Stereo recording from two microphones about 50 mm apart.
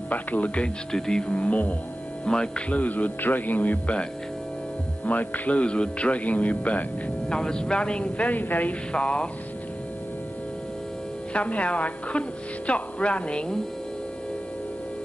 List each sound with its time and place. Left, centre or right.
0.1 s speech: left
0.9 s speech: centre; by 1.8 s left
2.2 s hum: centre
2.7 s speech: left
7.3 s speech: centre; by 8.7 s left
8.9 s speech: left
11.3 s speech: left